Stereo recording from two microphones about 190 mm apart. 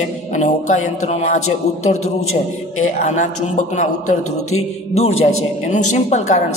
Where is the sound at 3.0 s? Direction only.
40° left (ahead or behind).